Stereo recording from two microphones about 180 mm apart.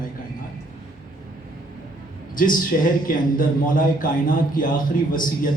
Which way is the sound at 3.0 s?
50° left (ahead or behind).